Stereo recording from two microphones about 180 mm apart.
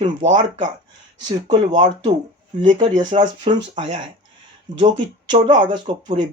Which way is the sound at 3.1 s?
35° right (ahead or behind).